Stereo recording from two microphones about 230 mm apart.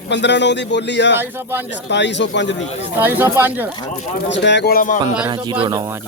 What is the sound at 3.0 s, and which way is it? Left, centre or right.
Speech, centre.